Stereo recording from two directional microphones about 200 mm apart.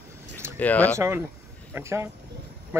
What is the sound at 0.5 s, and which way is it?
Speech, 10° left (ahead or behind).